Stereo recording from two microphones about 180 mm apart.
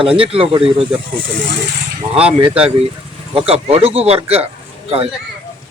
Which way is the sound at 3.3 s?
35° right (ahead or behind).